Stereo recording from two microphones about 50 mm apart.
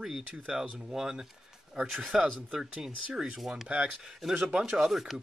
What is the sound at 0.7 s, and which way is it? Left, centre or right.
Speech, centre.